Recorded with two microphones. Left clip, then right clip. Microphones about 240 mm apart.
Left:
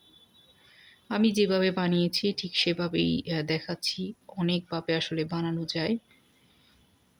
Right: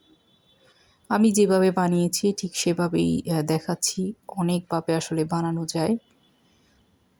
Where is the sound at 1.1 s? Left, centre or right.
Centre.